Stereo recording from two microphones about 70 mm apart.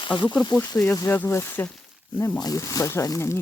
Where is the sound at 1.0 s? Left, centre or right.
Left.